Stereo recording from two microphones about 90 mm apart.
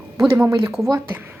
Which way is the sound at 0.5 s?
35° right (ahead or behind).